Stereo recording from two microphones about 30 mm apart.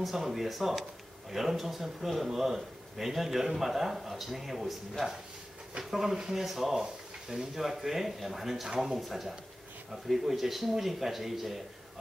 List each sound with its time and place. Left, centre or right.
0.0 s a man's voice: centre
6.7 s a sound: centre
7.5 s a man's voice: centre